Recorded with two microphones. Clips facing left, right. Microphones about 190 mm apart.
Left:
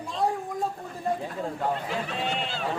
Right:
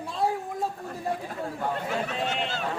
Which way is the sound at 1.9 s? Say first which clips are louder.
Right 1 dB; 45° right (ahead or behind).